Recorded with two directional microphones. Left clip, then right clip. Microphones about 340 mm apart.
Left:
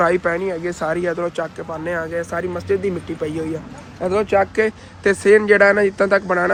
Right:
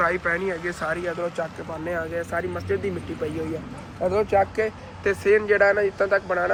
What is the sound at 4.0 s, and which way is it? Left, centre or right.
A man's voice, left.